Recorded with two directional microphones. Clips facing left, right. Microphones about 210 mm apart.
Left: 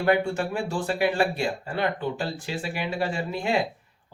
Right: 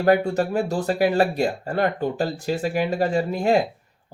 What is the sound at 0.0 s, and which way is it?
Speech, 40° right (ahead or behind).